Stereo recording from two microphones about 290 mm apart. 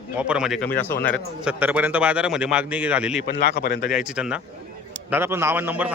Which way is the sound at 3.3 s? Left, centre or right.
Left.